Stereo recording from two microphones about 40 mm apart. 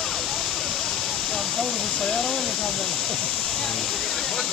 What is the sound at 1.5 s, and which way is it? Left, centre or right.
Speech, centre.